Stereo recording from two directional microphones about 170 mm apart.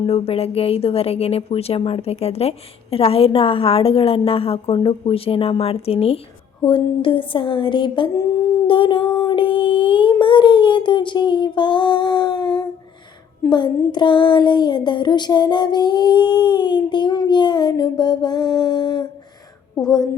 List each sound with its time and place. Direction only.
0.0 s a woman's voice: 35° left (ahead or behind)
6.7 s child singing: 30° left (ahead or behind)
8.6 s a sound: 30° left (ahead or behind)
9.1 s child singing: 30° left (ahead or behind)